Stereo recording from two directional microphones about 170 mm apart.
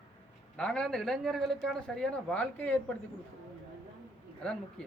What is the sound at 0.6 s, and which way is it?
Speech, 5° left (ahead or behind).